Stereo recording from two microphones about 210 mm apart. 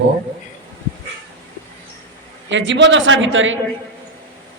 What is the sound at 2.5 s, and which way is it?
A woman's voice, 60° right (ahead or behind).